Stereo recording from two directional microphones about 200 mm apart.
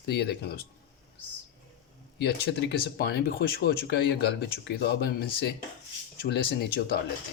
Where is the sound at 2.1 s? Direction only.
55° left (ahead or behind).